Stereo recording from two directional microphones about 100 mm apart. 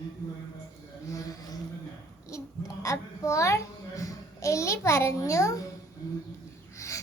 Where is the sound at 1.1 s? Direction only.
35° left (ahead or behind).